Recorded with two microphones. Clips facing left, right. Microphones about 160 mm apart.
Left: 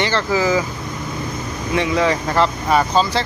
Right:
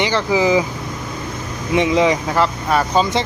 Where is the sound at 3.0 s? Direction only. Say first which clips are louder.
Right 1 dB; 20° right (ahead or behind).